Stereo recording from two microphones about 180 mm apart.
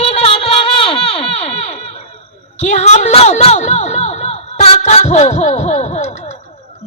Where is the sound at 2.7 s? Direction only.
40° left (ahead or behind).